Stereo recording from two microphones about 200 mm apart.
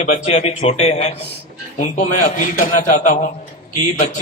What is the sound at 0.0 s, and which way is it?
A man's voice, 35° left (ahead or behind).